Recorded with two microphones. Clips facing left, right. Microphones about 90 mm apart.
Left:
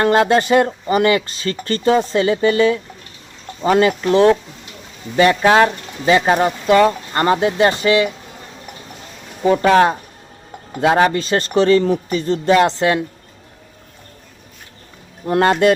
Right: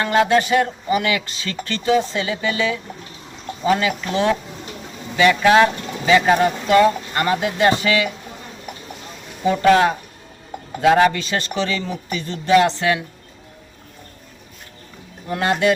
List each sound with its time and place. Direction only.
0.0 s speech: 45° left (ahead or behind); by 8.1 s 25° left (ahead or behind)
10.8 s speech: 30° left (ahead or behind)
15.3 s speech: 50° left (ahead or behind)